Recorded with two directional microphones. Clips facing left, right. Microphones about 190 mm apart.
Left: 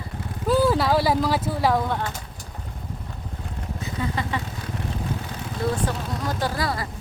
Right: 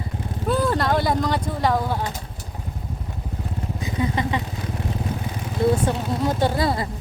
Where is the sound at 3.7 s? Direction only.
15° right (ahead or behind).